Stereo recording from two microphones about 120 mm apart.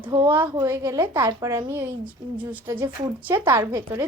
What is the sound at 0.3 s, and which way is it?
Speech, 45° right (ahead or behind).